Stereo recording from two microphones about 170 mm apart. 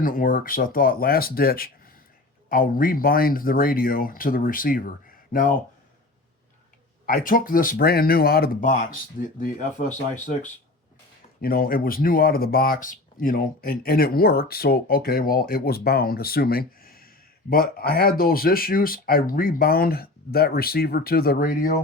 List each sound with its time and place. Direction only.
0.0 s speech: 55° left (ahead or behind)
7.0 s speech: 55° left (ahead or behind)
11.3 s speech: 60° left (ahead or behind)